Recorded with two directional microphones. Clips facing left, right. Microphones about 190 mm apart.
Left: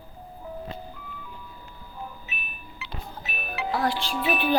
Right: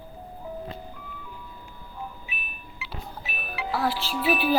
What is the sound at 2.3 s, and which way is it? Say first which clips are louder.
Beep: even; 10° right (ahead or behind).